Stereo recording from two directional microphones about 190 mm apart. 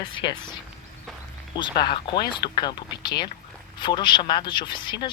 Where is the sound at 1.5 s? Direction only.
25° left (ahead or behind).